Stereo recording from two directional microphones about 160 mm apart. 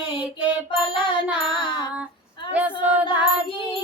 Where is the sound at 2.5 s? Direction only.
10° right (ahead or behind).